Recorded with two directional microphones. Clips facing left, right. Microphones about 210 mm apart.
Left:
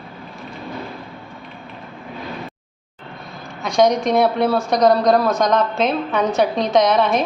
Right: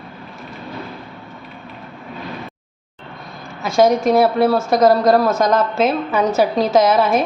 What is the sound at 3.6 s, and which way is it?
A woman's voice, 5° right (ahead or behind).